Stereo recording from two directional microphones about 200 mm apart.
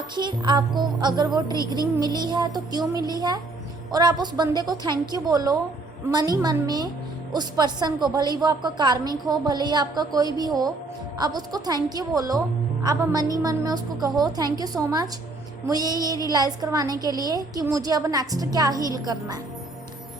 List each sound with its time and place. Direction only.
0.2 s a woman's voice: 20° right (ahead or behind)